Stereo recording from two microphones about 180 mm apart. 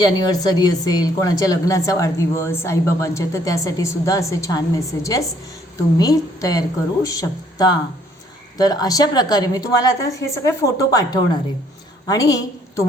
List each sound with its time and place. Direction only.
0.0 s a woman's voice: 20° left (ahead or behind)